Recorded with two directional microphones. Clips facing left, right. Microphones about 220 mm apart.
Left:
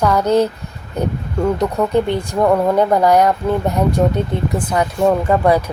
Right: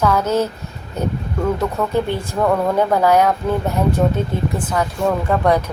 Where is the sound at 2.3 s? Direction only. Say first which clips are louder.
Left 3 dB; 15° left (ahead or behind).